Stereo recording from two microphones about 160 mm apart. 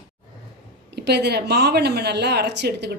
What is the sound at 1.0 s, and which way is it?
Speech, 90° right.